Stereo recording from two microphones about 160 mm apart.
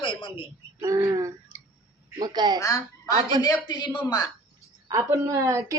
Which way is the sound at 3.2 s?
30° right (ahead or behind).